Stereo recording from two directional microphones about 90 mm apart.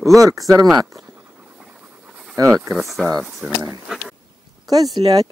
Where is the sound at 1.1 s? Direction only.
20° right (ahead or behind).